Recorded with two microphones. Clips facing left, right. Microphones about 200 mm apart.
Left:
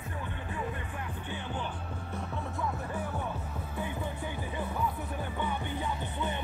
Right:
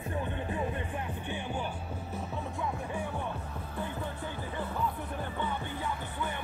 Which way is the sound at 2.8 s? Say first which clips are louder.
Even; 10° right (ahead or behind).